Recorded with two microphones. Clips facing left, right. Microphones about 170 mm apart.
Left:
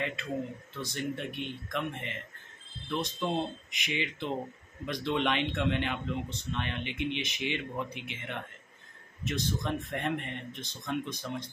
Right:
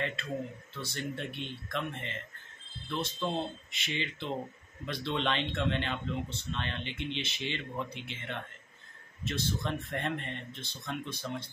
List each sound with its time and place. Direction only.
0.0 s speech: 15° left (ahead or behind)